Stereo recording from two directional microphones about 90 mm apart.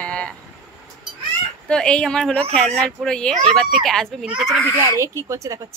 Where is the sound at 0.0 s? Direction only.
10° left (ahead or behind).